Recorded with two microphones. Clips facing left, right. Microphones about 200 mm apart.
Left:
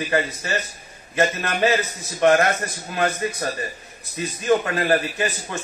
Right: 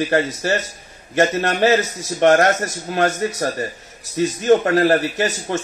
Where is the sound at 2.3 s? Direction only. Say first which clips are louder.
Right 4 dB; 40° right (ahead or behind).